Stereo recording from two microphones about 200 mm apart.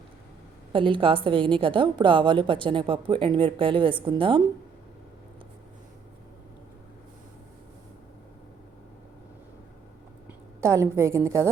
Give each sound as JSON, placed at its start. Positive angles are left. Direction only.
{"t": 0.7, "sound": "a woman's voice", "side_deg": -25}
{"t": 10.6, "sound": "a woman's voice", "side_deg": -15}